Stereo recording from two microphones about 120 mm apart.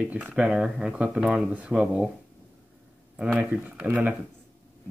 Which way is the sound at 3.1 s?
10° right (ahead or behind).